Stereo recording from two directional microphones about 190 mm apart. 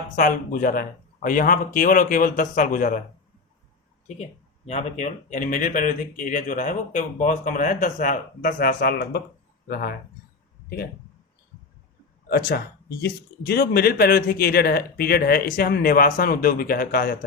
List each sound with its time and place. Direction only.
0.2 s speech: 45° left (ahead or behind)
4.0 s speech: 35° left (ahead or behind); by 9.9 s 50° left (ahead or behind)
13.0 s speech: 55° left (ahead or behind)